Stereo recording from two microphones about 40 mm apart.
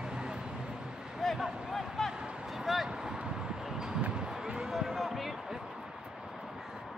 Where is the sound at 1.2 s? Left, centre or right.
Centre.